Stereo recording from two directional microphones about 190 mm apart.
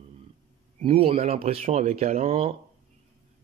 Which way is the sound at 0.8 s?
30° right (ahead or behind).